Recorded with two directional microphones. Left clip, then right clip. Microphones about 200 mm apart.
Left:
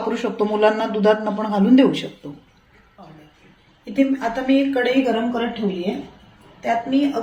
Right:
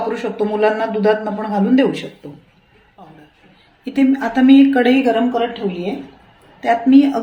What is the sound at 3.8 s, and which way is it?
Speech, 60° right (ahead or behind).